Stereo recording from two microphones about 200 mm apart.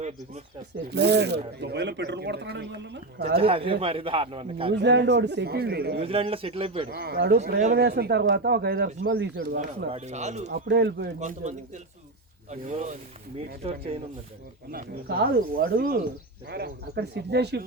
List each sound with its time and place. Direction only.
0.9 s speech: 55° right (ahead or behind)
3.3 s a man's voice: 30° right (ahead or behind)
4.7 s speech: 60° right (ahead or behind)
6.0 s a man's voice: 30° right (ahead or behind)
6.9 s speech: 55° right (ahead or behind)
9.9 s speech: 35° right (ahead or behind)
10.5 s speech: 60° right (ahead or behind)
11.2 s a man's voice: 35° right (ahead or behind)
14.7 s speech: 50° right (ahead or behind)